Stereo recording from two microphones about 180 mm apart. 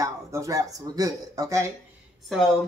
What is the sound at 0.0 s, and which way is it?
Speech, 20° right (ahead or behind).